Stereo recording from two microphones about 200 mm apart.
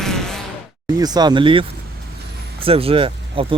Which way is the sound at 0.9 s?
20° right (ahead or behind).